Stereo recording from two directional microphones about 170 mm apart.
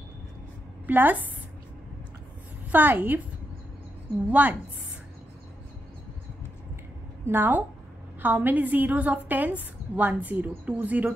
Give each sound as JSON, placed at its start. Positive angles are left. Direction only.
{"t": 0.8, "sound": "a woman's voice", "side_deg": -10}
{"t": 2.7, "sound": "a woman's voice", "side_deg": -10}
{"t": 4.3, "sound": "a woman's voice", "side_deg": -10}
{"t": 7.2, "sound": "a woman's voice", "side_deg": -10}